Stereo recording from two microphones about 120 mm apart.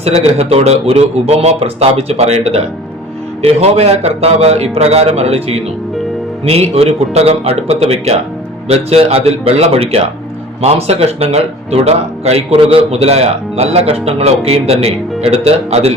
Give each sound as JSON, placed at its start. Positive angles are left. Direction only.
{"t": 0.0, "sound": "speech", "side_deg": -60}